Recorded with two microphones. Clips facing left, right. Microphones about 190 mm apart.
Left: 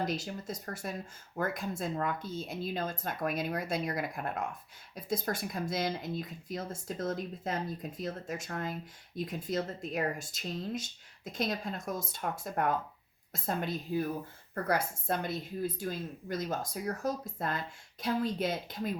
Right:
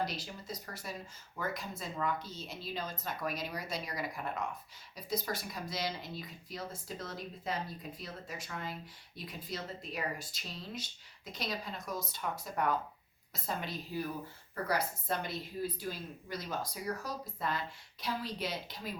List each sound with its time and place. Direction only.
0.0 s speech: 50° left (ahead or behind)